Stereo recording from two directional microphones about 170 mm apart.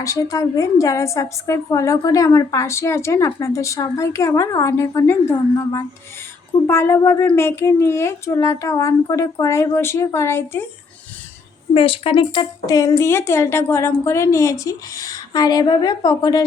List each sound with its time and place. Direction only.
0.0 s a woman's voice: 20° left (ahead or behind)
11.7 s speech: 35° left (ahead or behind)